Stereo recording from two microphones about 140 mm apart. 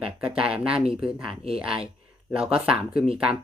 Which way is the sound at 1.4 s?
45° right (ahead or behind).